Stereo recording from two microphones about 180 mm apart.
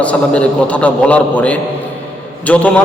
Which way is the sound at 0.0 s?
5° left (ahead or behind).